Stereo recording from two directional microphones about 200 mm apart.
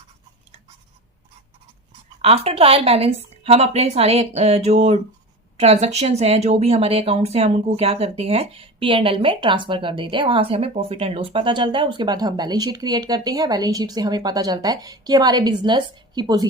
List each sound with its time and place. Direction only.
2.2 s a woman's voice: 30° right (ahead or behind)